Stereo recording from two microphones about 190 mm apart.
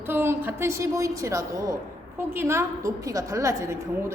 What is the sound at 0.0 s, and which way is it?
A woman's voice, 10° right (ahead or behind).